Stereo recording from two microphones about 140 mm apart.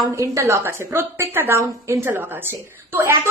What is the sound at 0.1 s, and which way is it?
A woman's voice, 20° right (ahead or behind).